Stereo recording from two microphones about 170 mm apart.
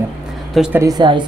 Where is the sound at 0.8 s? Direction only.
25° right (ahead or behind).